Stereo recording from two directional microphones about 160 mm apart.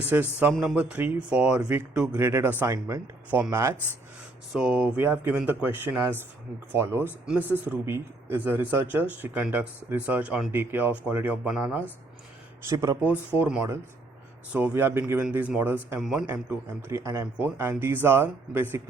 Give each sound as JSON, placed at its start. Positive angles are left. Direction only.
{"t": 0.0, "sound": "speech", "side_deg": -10}
{"t": 3.2, "sound": "speech", "side_deg": -10}
{"t": 4.5, "sound": "speech", "side_deg": -5}
{"t": 12.6, "sound": "speech", "side_deg": -20}
{"t": 16.0, "sound": "a man's voice", "side_deg": 0}
{"t": 16.2, "sound": "speech", "side_deg": -15}